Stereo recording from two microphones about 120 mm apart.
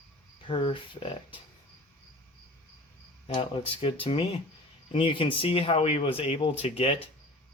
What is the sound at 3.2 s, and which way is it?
Speech, 50° left (ahead or behind).